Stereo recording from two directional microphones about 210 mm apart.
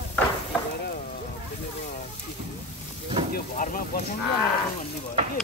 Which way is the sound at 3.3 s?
40° left (ahead or behind).